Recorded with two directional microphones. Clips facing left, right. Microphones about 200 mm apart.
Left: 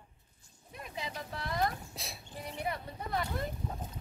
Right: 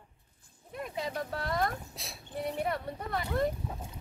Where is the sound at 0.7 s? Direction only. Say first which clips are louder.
Right 6 dB; 50° right (ahead or behind).